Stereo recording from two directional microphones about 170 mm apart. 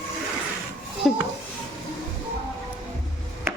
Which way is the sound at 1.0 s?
Centre (ahead or behind).